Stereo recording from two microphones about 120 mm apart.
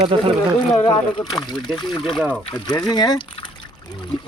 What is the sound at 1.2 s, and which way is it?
Speech, 35° left (ahead or behind).